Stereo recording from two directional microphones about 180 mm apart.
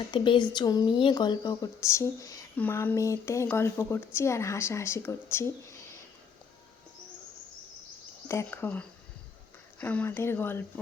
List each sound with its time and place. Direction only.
0.0 s speech: 25° left (ahead or behind)
8.3 s speech: 15° left (ahead or behind)